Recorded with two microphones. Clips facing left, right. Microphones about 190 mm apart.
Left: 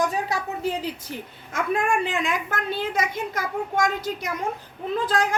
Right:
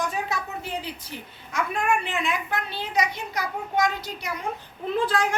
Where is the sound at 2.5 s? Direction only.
50° left (ahead or behind).